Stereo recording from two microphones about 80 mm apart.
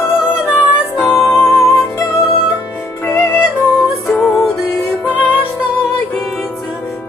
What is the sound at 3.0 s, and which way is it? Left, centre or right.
Music, left.